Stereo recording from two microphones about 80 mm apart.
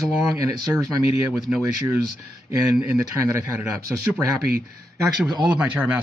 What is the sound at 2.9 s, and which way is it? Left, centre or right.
Speech, right.